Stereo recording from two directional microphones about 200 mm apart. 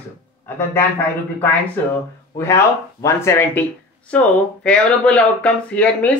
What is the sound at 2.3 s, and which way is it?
Speech, 15° left (ahead or behind).